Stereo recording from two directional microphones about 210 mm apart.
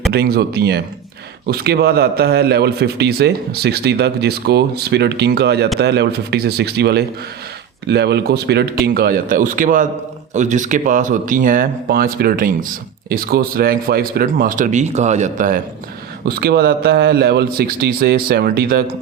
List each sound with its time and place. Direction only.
0.1 s a man's voice: 50° right (ahead or behind)